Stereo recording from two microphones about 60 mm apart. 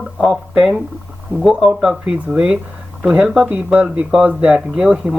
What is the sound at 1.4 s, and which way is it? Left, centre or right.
Speech, centre.